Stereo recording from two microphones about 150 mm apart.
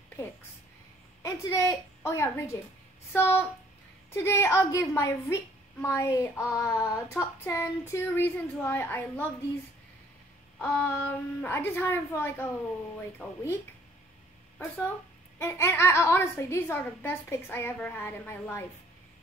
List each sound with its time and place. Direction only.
1.2 s a woman's voice: 20° left (ahead or behind)
10.6 s a woman's voice: 10° left (ahead or behind)
15.3 s a woman's voice: 20° left (ahead or behind)